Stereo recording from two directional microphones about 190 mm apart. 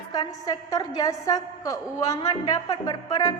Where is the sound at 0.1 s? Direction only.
20° left (ahead or behind).